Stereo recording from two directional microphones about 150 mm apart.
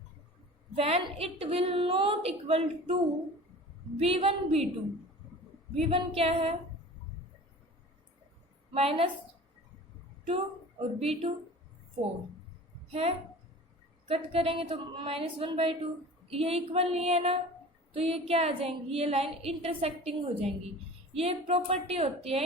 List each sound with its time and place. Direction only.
0.8 s a woman's voice: 40° right (ahead or behind)
5.7 s a woman's voice: 40° right (ahead or behind)
8.7 s a woman's voice: 40° right (ahead or behind)
10.2 s a woman's voice: 40° right (ahead or behind)
12.9 s a woman's voice: 40° right (ahead or behind)